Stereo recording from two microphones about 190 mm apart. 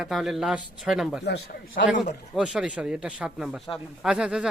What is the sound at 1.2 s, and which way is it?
Speech, 70° left (ahead or behind).